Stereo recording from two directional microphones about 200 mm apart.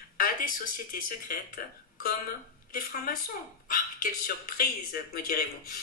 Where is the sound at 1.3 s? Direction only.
50° left (ahead or behind).